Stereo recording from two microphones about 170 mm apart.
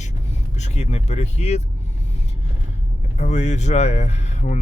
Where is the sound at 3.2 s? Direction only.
45° left (ahead or behind).